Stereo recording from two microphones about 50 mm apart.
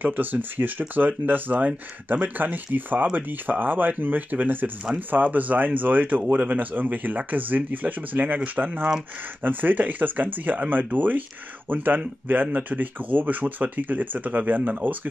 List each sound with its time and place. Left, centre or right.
0.0 s speech: right